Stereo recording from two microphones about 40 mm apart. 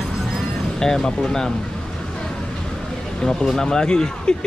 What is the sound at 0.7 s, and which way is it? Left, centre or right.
Speech, centre.